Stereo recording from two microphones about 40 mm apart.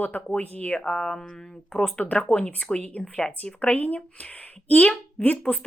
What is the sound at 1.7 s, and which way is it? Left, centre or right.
A woman's voice, left.